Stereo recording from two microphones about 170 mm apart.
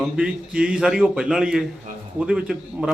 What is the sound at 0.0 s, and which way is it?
A man's voice, 5° right (ahead or behind).